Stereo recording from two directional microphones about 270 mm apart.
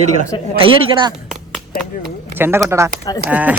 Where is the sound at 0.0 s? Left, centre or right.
Right.